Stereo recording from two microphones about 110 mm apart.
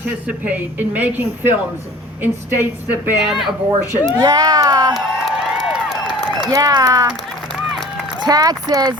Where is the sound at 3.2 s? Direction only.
Centre (ahead or behind).